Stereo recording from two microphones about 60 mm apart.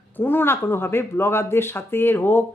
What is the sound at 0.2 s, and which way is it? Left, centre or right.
A woman's voice, left.